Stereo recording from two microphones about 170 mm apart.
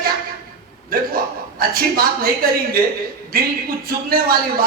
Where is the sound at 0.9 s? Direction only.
60° right (ahead or behind).